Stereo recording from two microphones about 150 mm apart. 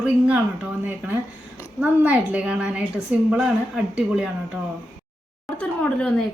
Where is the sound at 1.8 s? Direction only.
10° right (ahead or behind).